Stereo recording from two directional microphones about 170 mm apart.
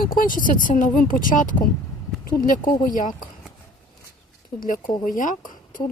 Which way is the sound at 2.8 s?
50° left (ahead or behind).